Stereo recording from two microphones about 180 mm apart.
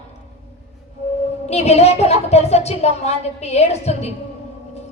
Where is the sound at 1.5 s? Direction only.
35° left (ahead or behind).